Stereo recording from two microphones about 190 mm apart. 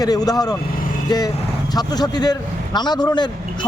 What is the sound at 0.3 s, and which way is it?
Speech, 20° left (ahead or behind).